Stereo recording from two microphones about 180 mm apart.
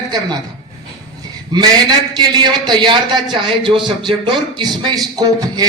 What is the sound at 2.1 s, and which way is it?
A man's voice, 25° right (ahead or behind).